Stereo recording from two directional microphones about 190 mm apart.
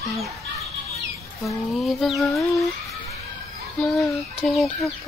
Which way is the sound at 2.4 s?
15° left (ahead or behind).